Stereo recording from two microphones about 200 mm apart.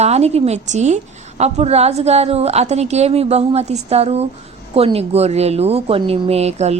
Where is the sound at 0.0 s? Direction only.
30° right (ahead or behind).